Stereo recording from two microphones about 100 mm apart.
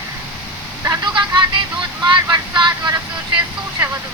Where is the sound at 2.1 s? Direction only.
50° right (ahead or behind).